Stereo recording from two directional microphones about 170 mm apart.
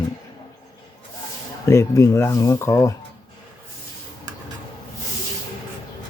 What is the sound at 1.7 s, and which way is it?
Speech, 15° left (ahead or behind).